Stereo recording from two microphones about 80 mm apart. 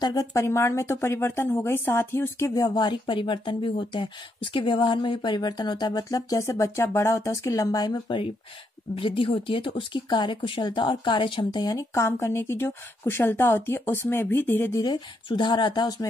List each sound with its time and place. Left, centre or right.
0.0 s speech: left
2.5 s speech: left
6.0 s speech: left
8.9 s speech: left
11.7 s speech: left
14.7 s speech: left
15.2 s speech: left